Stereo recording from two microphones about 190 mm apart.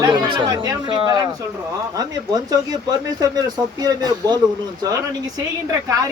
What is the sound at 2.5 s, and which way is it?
Speech, 20° right (ahead or behind).